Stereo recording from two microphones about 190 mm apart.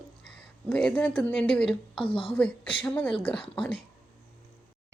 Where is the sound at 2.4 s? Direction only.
10° left (ahead or behind).